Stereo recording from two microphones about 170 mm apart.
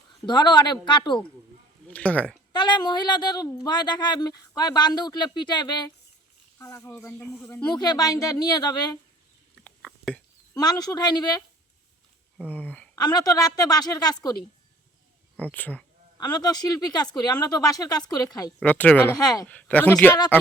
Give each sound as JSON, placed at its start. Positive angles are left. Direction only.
{"t": 0.3, "sound": "speech", "side_deg": 25}
{"t": 1.9, "sound": "speech", "side_deg": 10}
{"t": 2.5, "sound": "speech", "side_deg": 25}
{"t": 7.4, "sound": "speech", "side_deg": 20}
{"t": 9.6, "sound": "a sound", "side_deg": 5}
{"t": 10.5, "sound": "speech", "side_deg": 20}
{"t": 12.5, "sound": "speech", "side_deg": 10}
{"t": 13.0, "sound": "speech", "side_deg": 25}
{"t": 15.5, "sound": "speech", "side_deg": 10}
{"t": 16.1, "sound": "speech", "side_deg": 25}
{"t": 18.6, "sound": "speech", "side_deg": 10}
{"t": 19.1, "sound": "speech", "side_deg": 20}
{"t": 19.5, "sound": "speech", "side_deg": 10}